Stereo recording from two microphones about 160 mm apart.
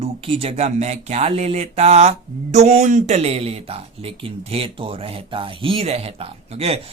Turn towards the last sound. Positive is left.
turn(degrees=-40)  # may be behind; listen again after turning